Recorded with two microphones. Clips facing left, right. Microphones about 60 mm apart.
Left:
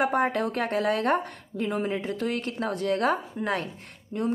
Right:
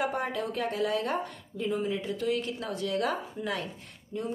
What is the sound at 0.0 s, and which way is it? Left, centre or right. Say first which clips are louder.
Speech: left 6 dB; left.